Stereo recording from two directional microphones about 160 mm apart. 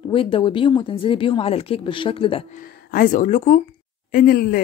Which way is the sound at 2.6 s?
60° left (ahead or behind).